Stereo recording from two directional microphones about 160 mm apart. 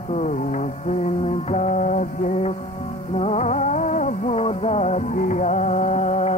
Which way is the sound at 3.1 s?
45° left (ahead or behind).